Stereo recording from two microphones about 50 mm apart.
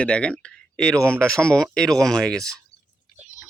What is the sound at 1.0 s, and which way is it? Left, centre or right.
Speech, right.